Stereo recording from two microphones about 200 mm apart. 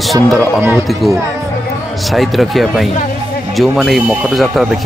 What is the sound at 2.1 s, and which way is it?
Speech, centre (ahead or behind).